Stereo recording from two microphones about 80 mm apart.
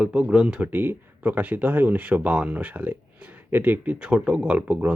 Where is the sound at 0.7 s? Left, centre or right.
Right.